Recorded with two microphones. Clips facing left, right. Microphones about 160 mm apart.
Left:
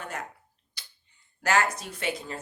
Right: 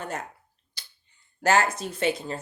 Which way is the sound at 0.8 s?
30° right (ahead or behind).